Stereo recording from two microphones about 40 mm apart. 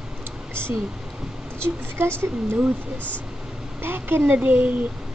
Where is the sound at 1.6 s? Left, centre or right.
Right.